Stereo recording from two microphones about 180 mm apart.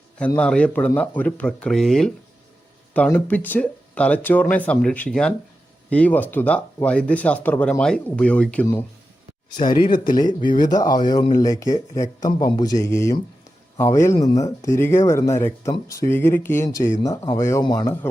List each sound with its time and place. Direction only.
0.3 s speech: 5° left (ahead or behind)
9.6 s speech: 25° left (ahead or behind)